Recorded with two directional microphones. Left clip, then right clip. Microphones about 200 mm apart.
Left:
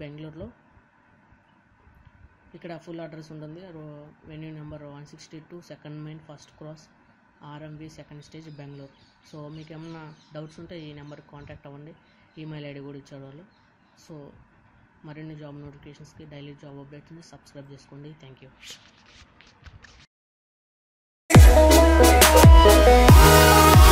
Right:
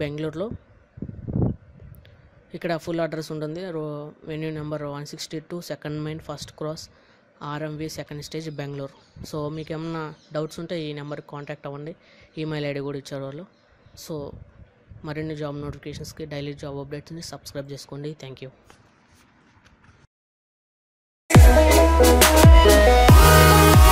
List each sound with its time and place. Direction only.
0.0 s speech: 50° right (ahead or behind)
2.5 s speech: 45° right (ahead or behind)
15.0 s speech: 50° right (ahead or behind)
21.3 s music: centre (ahead or behind)